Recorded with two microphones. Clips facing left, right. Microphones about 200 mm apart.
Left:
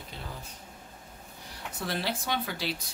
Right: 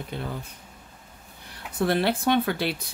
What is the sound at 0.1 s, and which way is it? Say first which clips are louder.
Speech: right 11 dB; 60° right (ahead or behind).